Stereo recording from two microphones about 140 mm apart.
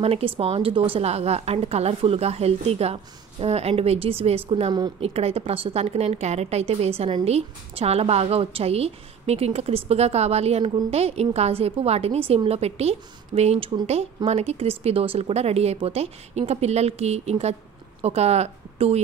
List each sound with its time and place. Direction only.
0.0 s speech: 45° right (ahead or behind)